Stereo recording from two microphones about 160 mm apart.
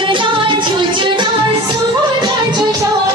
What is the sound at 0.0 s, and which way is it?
Music, 30° right (ahead or behind).